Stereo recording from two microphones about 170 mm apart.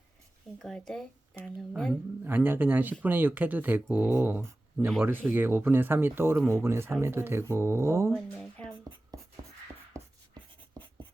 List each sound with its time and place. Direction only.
0.6 s speech: 5° left (ahead or behind)
2.2 s speech: 10° right (ahead or behind)
8.1 s speech: 5° left (ahead or behind)
10.0 s writing: 15° right (ahead or behind)